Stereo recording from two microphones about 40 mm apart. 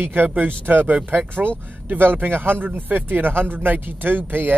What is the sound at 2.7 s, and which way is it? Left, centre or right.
Speech, right.